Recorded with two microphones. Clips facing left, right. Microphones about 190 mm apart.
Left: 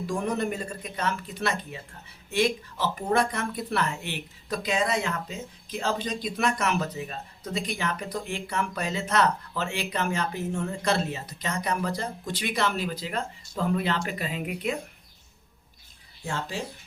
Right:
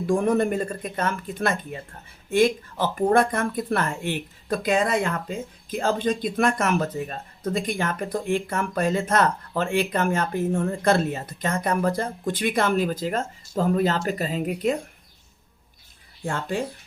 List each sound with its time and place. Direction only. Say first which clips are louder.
0.1 s speech: right 8 dB; 50° right (ahead or behind)
16.2 s speech: right 5 dB; 55° right (ahead or behind)